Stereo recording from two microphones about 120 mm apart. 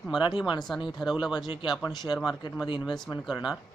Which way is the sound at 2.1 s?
Centre (ahead or behind).